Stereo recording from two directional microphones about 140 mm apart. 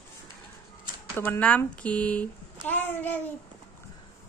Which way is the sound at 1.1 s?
15° left (ahead or behind).